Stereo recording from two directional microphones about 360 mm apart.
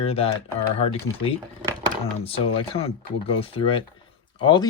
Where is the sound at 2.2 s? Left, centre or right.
Centre.